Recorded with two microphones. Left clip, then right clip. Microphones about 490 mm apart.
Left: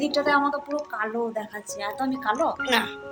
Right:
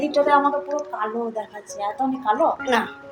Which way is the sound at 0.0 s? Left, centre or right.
Left.